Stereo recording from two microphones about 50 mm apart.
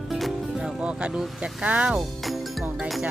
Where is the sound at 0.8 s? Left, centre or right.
Centre.